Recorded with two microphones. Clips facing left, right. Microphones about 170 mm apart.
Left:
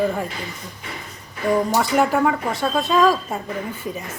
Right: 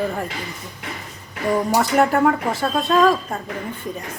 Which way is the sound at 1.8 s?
Centre (ahead or behind).